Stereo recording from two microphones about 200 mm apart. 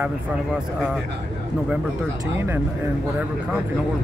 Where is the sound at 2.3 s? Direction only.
10° right (ahead or behind).